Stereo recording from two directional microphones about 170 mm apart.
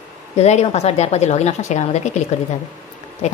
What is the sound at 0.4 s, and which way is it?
A woman's voice, 40° left (ahead or behind).